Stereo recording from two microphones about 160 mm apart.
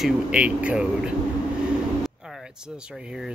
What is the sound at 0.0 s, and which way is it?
Speech, 5° right (ahead or behind).